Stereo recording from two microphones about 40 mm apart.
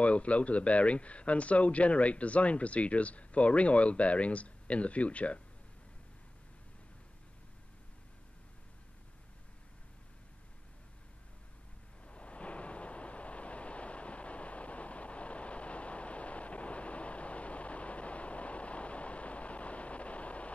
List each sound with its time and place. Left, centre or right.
0.0 s a man's voice: left
12.0 s vehicle: left